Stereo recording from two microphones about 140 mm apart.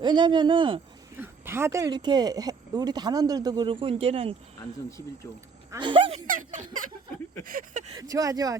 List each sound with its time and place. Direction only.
0.0 s speech: 30° right (ahead or behind)
1.2 s speech: 15° right (ahead or behind); by 4.4 s 40° right (ahead or behind)
5.8 s speech: 40° right (ahead or behind)
6.2 s speech: 70° right (ahead or behind)
7.9 s speech: 25° right (ahead or behind)